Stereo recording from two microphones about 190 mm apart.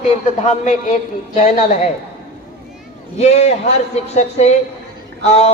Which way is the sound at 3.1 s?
35° left (ahead or behind).